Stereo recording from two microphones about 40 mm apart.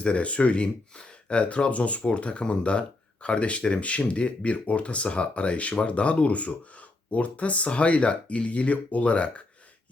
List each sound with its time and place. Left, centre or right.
0.0 s speech: left